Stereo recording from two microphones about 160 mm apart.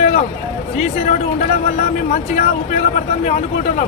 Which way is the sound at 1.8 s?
45° left (ahead or behind).